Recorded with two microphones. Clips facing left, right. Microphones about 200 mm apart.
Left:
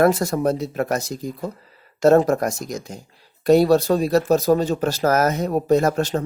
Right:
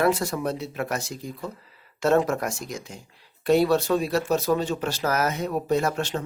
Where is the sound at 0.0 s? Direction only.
45° left (ahead or behind).